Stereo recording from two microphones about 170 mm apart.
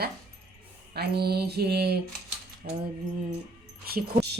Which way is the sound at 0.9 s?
70° right (ahead or behind).